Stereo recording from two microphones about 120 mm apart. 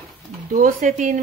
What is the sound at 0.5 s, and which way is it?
Speech, 90° right.